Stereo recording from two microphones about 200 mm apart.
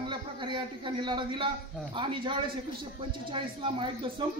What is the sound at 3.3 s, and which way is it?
Speech, 25° right (ahead or behind).